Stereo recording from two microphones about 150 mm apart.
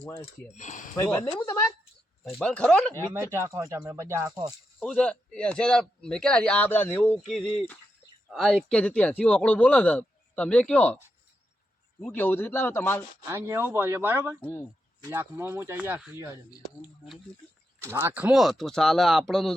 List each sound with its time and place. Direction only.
0.0 s speech: 15° left (ahead or behind)
0.5 s speech: 55° left (ahead or behind)
0.9 s speech: 20° left (ahead or behind)
2.4 s speech: 10° left (ahead or behind)
3.3 s speech: 20° right (ahead or behind)
4.8 s a man's voice: 5° left (ahead or behind)
13.2 s speech: 15° right (ahead or behind)
17.7 s a man's voice: 20° right (ahead or behind); by 19.5 s centre (ahead or behind)